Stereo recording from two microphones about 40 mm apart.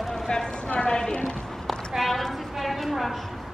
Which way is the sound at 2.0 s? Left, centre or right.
Centre.